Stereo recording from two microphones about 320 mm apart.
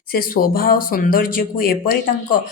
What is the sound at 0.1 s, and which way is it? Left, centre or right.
A woman's voice, left.